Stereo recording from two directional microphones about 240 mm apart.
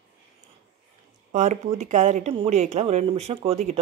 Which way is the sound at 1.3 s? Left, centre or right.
Right.